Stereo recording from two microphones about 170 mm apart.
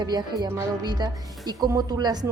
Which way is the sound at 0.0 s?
25° right (ahead or behind).